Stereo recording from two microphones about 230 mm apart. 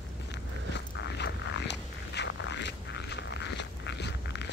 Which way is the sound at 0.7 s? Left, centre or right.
Left.